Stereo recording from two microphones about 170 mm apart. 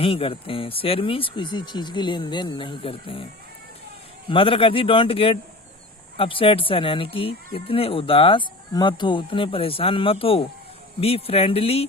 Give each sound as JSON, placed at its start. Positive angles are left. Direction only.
{"t": 0.0, "sound": "speech", "side_deg": 35}
{"t": 4.3, "sound": "speech", "side_deg": 30}